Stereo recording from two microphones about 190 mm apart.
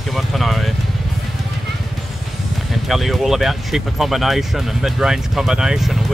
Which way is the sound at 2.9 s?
Centre (ahead or behind).